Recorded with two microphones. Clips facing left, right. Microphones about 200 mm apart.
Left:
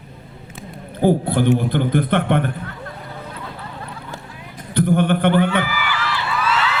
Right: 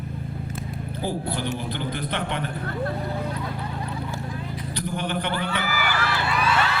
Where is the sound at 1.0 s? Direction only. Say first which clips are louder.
Left 12 dB; 55° left (ahead or behind).